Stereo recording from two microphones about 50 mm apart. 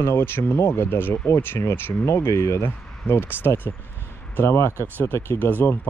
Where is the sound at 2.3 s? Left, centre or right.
Left.